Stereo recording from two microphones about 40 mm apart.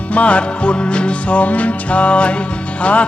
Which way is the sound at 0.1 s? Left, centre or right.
Left.